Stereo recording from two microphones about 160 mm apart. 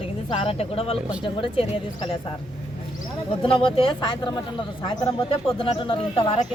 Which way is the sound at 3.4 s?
35° left (ahead or behind).